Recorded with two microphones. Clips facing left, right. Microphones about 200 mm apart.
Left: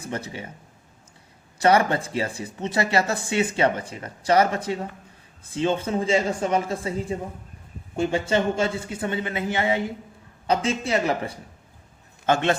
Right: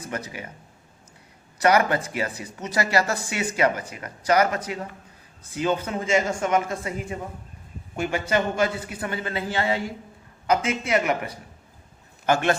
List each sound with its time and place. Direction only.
0.0 s speech: 30° left (ahead or behind)
1.5 s speech: 30° left (ahead or behind)
10.4 s a man's voice: 30° left (ahead or behind)